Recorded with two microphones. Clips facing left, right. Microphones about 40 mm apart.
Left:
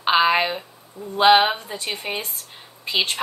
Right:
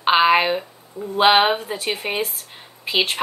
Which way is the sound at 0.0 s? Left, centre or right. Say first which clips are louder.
Right 2 dB; centre.